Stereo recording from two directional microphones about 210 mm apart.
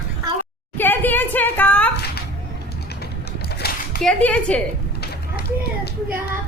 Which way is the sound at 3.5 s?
50° left (ahead or behind).